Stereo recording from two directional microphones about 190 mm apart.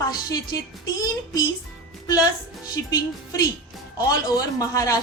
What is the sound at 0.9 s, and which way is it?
Speech, 20° left (ahead or behind).